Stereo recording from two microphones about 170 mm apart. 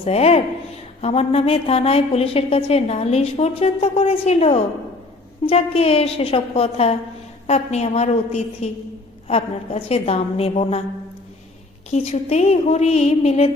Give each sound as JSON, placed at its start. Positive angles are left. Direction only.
{"t": 0.0, "sound": "a woman's voice", "side_deg": 35}
{"t": 11.9, "sound": "a woman's voice", "side_deg": 40}